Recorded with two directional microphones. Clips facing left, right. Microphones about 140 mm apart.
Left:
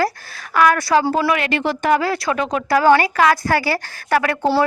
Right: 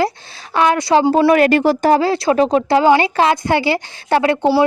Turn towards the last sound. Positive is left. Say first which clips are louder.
# right 3 dB
turn(degrees=-25)  # may be behind; listen again after turning